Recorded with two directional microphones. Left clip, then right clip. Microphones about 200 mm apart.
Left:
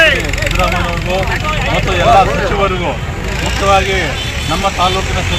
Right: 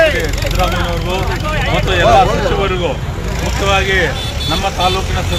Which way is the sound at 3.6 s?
5° right (ahead or behind).